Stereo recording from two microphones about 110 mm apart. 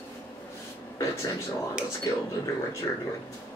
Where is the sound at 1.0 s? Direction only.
30° left (ahead or behind).